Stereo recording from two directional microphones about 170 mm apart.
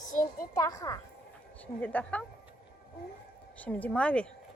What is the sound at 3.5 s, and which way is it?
Speech, 10° left (ahead or behind).